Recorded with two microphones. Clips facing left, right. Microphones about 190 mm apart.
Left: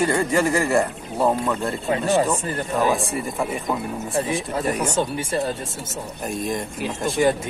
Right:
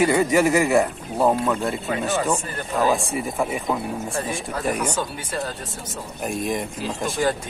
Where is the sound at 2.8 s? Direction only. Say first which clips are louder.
Right 3 dB; centre (ahead or behind).